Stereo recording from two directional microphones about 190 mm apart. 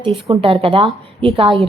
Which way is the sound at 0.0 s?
30° right (ahead or behind).